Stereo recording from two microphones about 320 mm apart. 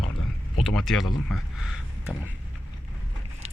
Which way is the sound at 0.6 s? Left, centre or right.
Centre.